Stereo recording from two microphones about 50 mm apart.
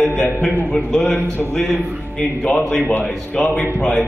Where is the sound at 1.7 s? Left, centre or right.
Left.